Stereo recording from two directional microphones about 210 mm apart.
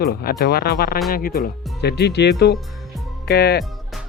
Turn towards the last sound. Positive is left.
turn(degrees=50)  # may be behind; listen again after turning